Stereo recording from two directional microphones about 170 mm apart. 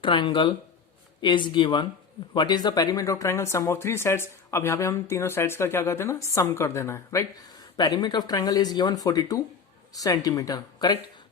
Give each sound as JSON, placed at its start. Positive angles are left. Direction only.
{"t": 0.0, "sound": "speech", "side_deg": 30}